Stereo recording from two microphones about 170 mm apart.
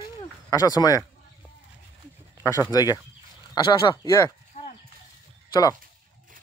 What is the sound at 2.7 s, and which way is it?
Speech, 25° left (ahead or behind).